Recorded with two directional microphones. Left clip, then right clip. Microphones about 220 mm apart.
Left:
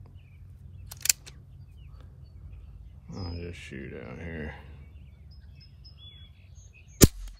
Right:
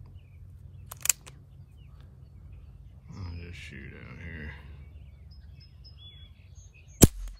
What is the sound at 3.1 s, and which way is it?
Speech, 5° right (ahead or behind).